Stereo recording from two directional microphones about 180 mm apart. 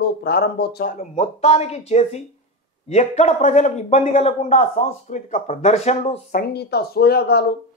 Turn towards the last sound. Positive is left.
turn(degrees=60)  # may be behind; listen again after turning